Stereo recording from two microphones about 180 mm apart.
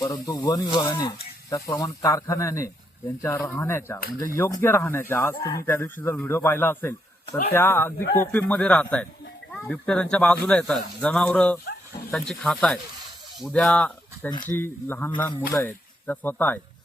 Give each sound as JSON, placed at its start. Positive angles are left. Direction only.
{"t": 0.0, "sound": "speech", "side_deg": 20}